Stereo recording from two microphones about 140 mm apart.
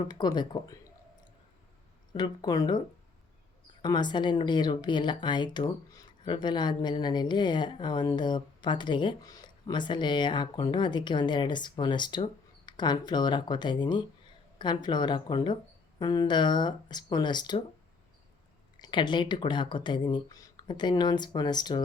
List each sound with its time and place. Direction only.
0.0 s speech: 30° left (ahead or behind)
2.1 s speech: 30° left (ahead or behind)
18.8 s speech: 30° left (ahead or behind)